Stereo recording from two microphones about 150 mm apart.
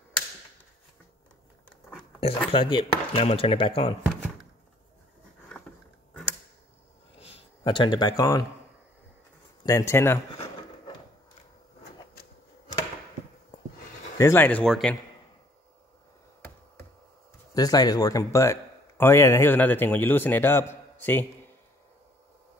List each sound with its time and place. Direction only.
2.1 s speech: 40° left (ahead or behind)
7.2 s a sound: 45° left (ahead or behind)
7.6 s speech: 30° left (ahead or behind)
9.6 s speech: 20° left (ahead or behind)
14.1 s a man's voice: 20° left (ahead or behind); by 15.0 s centre (ahead or behind)
17.6 s speech: 25° left (ahead or behind)